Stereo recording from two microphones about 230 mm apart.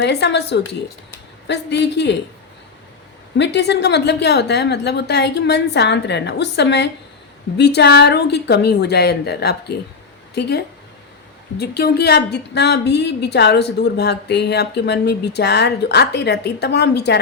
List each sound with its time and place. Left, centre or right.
0.0 s a woman's voice: left
3.3 s a woman's voice: left